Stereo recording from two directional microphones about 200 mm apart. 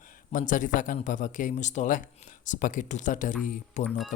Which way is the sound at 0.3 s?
40° left (ahead or behind).